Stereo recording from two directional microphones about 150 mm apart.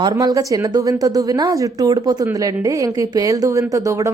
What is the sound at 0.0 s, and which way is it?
A woman's voice, 25° right (ahead or behind).